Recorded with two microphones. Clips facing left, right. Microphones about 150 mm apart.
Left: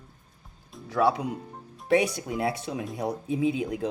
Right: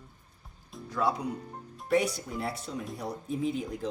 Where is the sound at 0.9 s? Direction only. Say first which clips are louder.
Left 6 dB; 75° left (ahead or behind).